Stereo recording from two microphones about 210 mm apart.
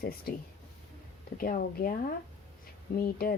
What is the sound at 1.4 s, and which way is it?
A woman's voice, 45° left (ahead or behind).